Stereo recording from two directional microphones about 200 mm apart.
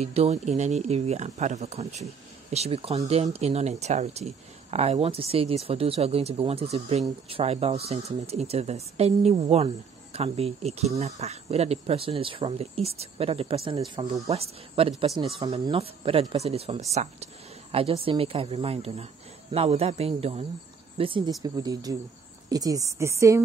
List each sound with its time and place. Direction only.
0.0 s speech: 30° right (ahead or behind); by 14.3 s 15° right (ahead or behind)
14.3 s speech: 30° right (ahead or behind); by 23.4 s 15° right (ahead or behind)